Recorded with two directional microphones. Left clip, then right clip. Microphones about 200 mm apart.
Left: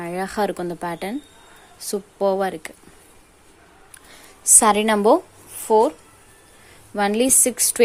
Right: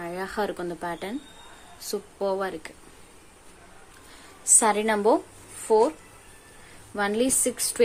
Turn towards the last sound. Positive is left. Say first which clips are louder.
# left 6 dB
turn(degrees=40)  # may be behind; listen again after turning